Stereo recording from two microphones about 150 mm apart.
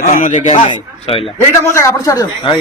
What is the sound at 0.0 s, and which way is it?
Speech, 60° left (ahead or behind).